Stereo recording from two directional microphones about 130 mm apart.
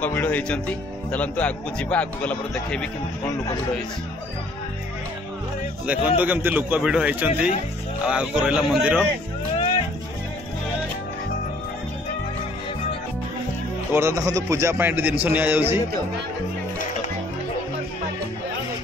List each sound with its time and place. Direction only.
0.0 s speech: 15° left (ahead or behind)
5.9 s a man's voice: 10° right (ahead or behind)
13.9 s a man's voice: 20° right (ahead or behind)